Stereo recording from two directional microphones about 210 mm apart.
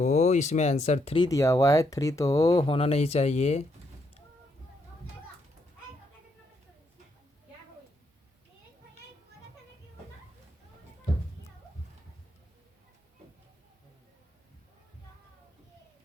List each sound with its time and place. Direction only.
0.0 s speech: 35° left (ahead or behind)